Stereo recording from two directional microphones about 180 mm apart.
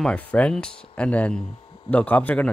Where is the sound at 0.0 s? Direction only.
5° left (ahead or behind).